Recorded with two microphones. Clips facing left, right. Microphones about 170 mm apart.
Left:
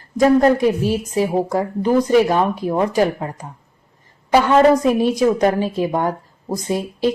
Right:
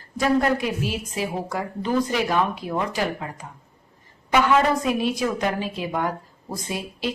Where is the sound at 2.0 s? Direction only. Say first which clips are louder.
Left 7 dB; 40° left (ahead or behind).